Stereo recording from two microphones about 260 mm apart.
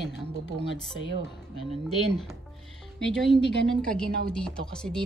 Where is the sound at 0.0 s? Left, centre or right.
Left.